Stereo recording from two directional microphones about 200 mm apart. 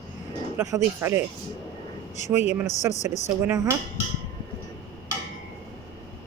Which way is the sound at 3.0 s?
35° left (ahead or behind).